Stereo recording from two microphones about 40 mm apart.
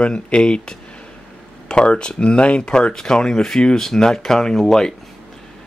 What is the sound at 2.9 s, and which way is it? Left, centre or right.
Speech, centre.